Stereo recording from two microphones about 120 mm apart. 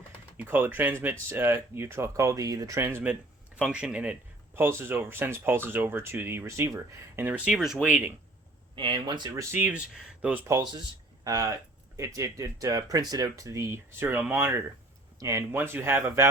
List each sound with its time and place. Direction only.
0.3 s speech: 15° right (ahead or behind)
7.3 s speech: 10° right (ahead or behind)
8.7 s speech: 40° right (ahead or behind); by 10.4 s 10° right (ahead or behind)
10.4 s speech: 25° right (ahead or behind)